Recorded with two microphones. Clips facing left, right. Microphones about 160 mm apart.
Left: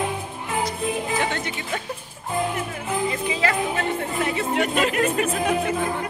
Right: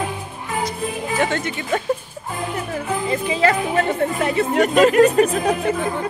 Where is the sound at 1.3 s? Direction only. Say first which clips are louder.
Right 6 dB; 50° right (ahead or behind).